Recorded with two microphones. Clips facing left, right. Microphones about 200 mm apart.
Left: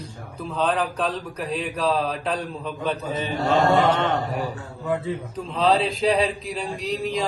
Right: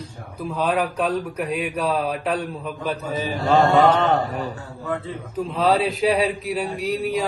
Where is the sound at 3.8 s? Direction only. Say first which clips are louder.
Right 4 dB; 40° right (ahead or behind).